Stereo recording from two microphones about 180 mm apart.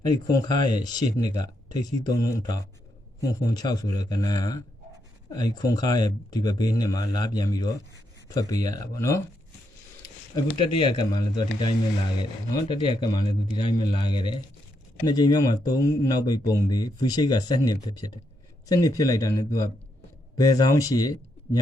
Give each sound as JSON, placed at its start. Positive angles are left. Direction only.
{"t": 0.3, "sound": "speech", "side_deg": 20}
{"t": 10.3, "sound": "speech", "side_deg": 20}